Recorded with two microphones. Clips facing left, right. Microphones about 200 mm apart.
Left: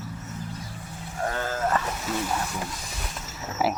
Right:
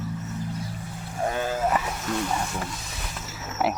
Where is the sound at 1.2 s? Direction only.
15° right (ahead or behind).